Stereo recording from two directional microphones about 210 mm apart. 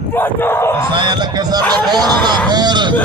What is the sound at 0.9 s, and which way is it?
Speech, 20° right (ahead or behind).